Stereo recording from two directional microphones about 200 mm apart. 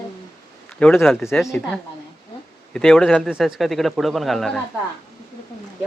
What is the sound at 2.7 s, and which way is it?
Speech, 5° left (ahead or behind).